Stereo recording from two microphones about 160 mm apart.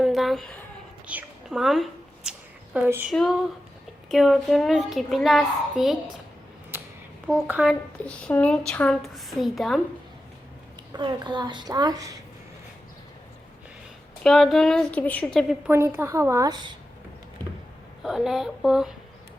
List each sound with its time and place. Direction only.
0.0 s a sound: centre (ahead or behind)
2.7 s a child's voice: 10° right (ahead or behind)
7.4 s speech: 5° right (ahead or behind)
8.0 s a child's voice: 10° left (ahead or behind)
10.9 s a woman's voice: 30° right (ahead or behind)
14.3 s a child's voice: centre (ahead or behind)
15.6 s a woman's voice: 15° right (ahead or behind)
18.0 s a child's voice: 5° right (ahead or behind)